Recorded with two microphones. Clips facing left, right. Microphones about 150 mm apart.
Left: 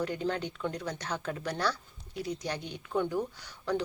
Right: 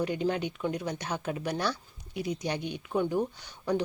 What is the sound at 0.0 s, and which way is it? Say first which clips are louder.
Speech: right 3 dB; 15° right (ahead or behind).